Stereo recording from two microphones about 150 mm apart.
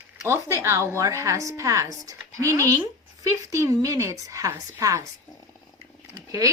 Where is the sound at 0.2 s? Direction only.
20° right (ahead or behind).